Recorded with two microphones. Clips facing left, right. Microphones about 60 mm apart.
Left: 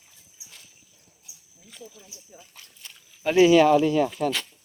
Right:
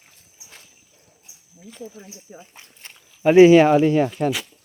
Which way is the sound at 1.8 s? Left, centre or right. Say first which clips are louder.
Right 8 dB; right.